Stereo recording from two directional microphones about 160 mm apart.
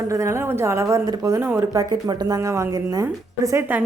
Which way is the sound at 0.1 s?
20° right (ahead or behind).